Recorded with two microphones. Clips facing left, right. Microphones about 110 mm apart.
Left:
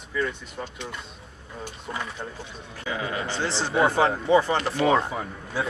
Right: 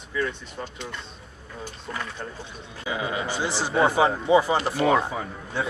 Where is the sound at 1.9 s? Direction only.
25° left (ahead or behind).